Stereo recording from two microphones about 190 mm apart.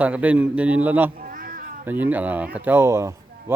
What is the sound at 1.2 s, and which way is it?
Cat, 50° right (ahead or behind).